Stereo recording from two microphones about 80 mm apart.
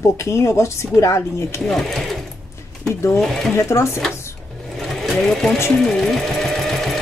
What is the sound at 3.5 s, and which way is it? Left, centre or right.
Speech, left.